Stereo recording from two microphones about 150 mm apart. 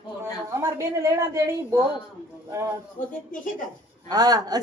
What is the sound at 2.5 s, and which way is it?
Speech, 20° right (ahead or behind).